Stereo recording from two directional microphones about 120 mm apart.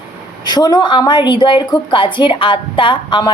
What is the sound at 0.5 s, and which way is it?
A woman's voice, 35° left (ahead or behind).